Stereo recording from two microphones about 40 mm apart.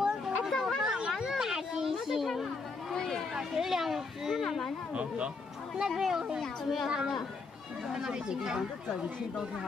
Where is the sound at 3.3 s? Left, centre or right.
Centre.